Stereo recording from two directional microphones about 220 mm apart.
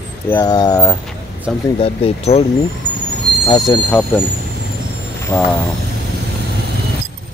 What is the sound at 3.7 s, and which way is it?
Speech, 10° left (ahead or behind).